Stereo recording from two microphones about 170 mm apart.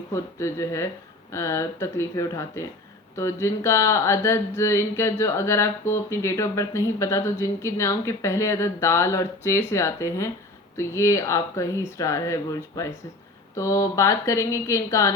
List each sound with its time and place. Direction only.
0.1 s speech: 15° left (ahead or behind)